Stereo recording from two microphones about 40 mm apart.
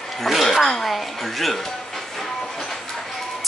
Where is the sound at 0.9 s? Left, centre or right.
Centre.